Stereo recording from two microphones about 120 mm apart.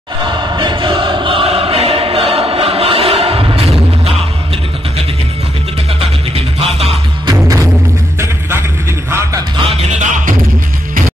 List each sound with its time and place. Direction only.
0.6 s choir: 45° right (ahead or behind)
6.3 s music: 55° right (ahead or behind)
7.2 s music: 30° right (ahead or behind)
9.7 s music: 80° right